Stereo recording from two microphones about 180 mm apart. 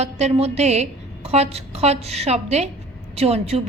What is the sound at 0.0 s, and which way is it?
A woman's voice, 35° right (ahead or behind).